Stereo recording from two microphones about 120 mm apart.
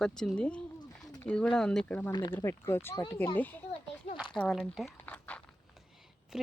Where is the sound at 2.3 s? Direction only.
20° left (ahead or behind).